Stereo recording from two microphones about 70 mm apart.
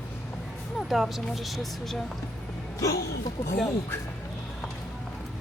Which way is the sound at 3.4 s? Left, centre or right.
Left.